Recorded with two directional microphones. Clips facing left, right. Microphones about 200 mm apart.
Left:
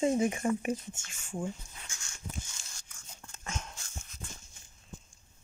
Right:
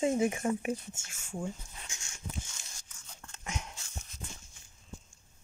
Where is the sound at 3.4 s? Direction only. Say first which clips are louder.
Even; 15° right (ahead or behind).